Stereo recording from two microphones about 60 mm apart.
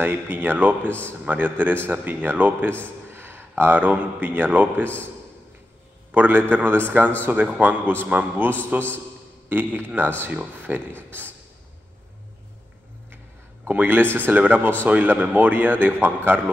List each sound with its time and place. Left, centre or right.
0.0 s speech: right
0.8 s speech: left
1.2 s speech: right
6.1 s speech: right
13.7 s speech: right